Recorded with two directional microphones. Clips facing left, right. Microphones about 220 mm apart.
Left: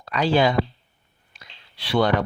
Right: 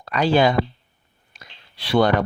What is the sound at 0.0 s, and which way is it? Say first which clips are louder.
Speech: right 2 dB; 50° right (ahead or behind).